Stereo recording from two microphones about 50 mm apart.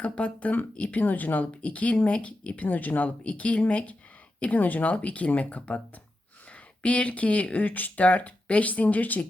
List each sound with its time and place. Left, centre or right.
0.0 s speech: left